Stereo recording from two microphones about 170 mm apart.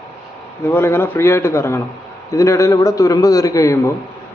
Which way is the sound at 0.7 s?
15° left (ahead or behind).